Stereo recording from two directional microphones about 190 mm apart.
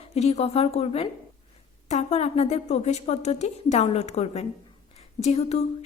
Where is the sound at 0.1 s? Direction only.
35° left (ahead or behind).